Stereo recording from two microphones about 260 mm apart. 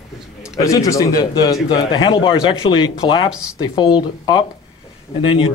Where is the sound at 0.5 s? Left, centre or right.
Centre.